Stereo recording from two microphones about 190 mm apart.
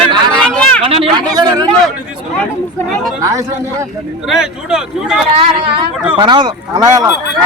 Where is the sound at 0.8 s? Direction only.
30° right (ahead or behind).